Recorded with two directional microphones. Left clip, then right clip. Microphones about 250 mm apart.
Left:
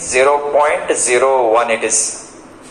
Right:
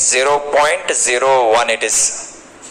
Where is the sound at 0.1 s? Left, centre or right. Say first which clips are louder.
Left 3 dB; right.